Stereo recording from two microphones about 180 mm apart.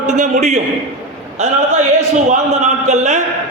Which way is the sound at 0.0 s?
40° right (ahead or behind).